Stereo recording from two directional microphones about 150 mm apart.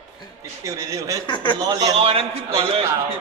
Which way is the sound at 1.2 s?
30° left (ahead or behind).